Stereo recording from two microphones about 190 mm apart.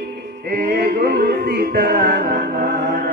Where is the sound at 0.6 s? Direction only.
55° right (ahead or behind).